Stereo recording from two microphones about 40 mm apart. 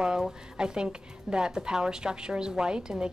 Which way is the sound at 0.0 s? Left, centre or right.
Centre.